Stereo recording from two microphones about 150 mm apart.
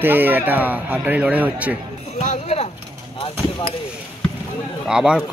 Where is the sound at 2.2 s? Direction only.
50° left (ahead or behind).